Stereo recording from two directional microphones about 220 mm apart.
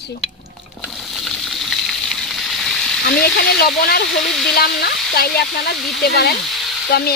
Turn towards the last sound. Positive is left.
turn(degrees=45)  # may be behind; listen again after turning